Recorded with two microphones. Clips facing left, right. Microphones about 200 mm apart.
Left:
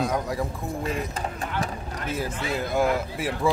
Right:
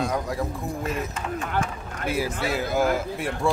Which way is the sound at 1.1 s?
35° left (ahead or behind).